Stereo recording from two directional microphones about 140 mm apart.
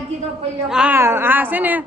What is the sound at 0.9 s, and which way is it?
Speech, 15° right (ahead or behind).